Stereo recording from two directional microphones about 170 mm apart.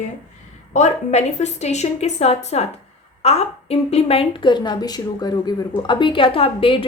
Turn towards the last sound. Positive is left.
turn(degrees=30)  # may be behind; listen again after turning